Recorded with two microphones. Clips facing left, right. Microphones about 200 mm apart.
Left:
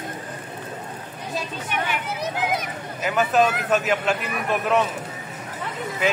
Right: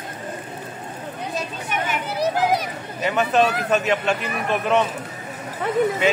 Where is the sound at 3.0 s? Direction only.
Centre (ahead or behind).